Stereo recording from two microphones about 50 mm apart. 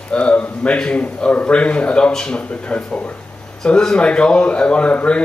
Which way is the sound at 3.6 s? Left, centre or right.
Centre.